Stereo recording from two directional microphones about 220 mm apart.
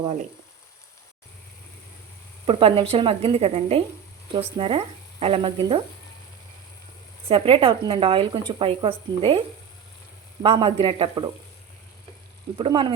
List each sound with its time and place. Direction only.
0.0 s speech: 30° right (ahead or behind)
2.5 s speech: 25° right (ahead or behind)
7.3 s speech: 25° right (ahead or behind)
10.4 s speech: 25° right (ahead or behind)
12.5 s speech: 20° right (ahead or behind)